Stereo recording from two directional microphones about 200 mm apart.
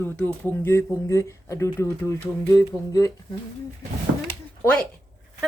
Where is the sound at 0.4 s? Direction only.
10° left (ahead or behind).